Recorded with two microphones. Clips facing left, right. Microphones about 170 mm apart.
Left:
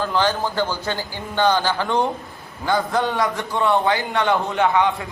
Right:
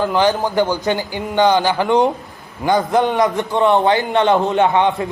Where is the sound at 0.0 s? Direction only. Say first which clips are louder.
Right 5 dB; 15° right (ahead or behind).